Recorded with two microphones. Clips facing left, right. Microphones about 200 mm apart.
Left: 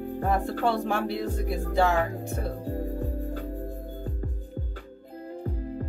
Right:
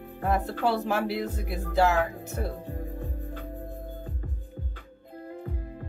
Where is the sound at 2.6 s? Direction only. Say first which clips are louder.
Left 6 dB; 40° left (ahead or behind).